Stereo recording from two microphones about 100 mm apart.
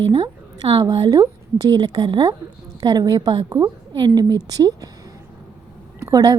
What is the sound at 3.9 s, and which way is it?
A woman's voice, 50° right (ahead or behind).